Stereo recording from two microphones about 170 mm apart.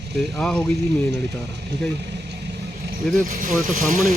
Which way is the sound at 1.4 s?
90° right.